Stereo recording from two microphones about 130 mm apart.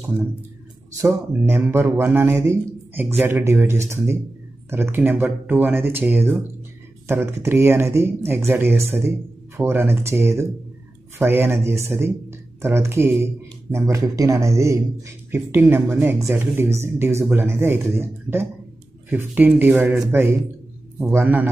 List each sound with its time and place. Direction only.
1.0 s speech: 20° right (ahead or behind)